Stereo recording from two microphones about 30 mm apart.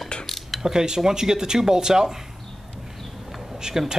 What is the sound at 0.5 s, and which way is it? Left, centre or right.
Speech, centre.